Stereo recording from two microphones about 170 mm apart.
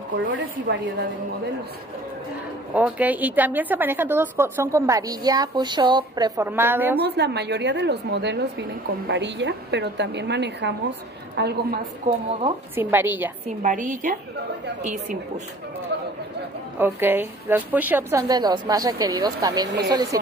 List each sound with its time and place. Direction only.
0.2 s a woman's voice: 90° right
2.7 s a woman's voice: 10° right (ahead or behind)
7.0 s a woman's voice: 80° right
12.7 s a woman's voice: 10° right (ahead or behind)
13.6 s a woman's voice: 50° right (ahead or behind)
15.9 s chatter: 90° right
16.7 s a woman's voice: 10° right (ahead or behind)
18.3 s speech: 25° right (ahead or behind)